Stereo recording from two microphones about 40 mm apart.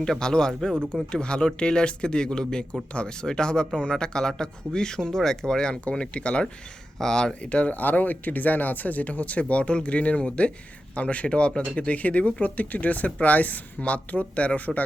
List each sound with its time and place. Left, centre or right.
0.0 s speech: centre
7.7 s speech: left